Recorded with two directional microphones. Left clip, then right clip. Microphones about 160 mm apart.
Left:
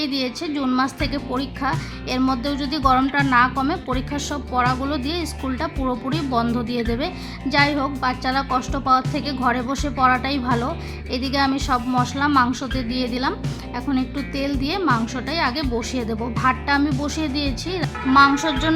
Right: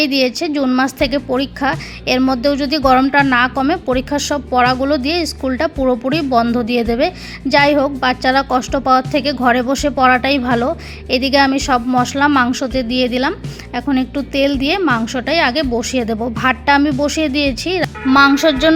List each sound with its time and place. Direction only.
0.0 s a woman's voice: 30° right (ahead or behind)